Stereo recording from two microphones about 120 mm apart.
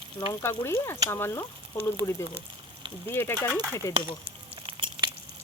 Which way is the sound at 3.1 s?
15° left (ahead or behind).